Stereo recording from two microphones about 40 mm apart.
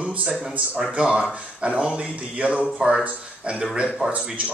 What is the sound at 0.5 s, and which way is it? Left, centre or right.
Speech, right.